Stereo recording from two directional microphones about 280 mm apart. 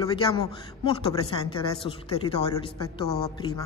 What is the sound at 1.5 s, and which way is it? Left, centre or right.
Speech, centre.